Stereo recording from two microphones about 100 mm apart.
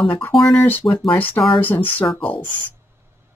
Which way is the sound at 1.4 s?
65° left (ahead or behind).